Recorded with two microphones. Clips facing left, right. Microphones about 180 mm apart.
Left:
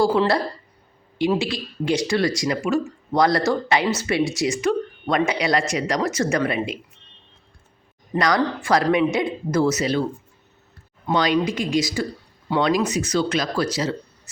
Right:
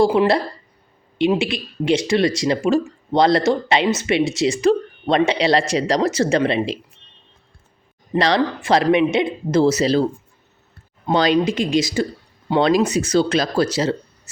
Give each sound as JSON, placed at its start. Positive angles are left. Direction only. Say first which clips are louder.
{"t": 0.0, "sound": "speech", "louder": "right 3 dB", "side_deg": -20}
{"t": 8.1, "sound": "speech", "louder": "right 3 dB", "side_deg": -25}